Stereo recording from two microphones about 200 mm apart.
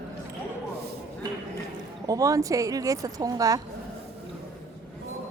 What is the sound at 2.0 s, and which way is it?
Speech, 15° right (ahead or behind).